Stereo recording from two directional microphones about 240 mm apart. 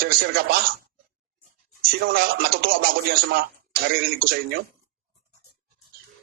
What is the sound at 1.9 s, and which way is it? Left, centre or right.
A man's voice, right.